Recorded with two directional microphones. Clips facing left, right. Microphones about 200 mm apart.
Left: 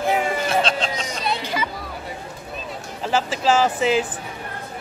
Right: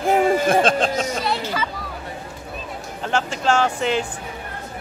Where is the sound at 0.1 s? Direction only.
50° right (ahead or behind).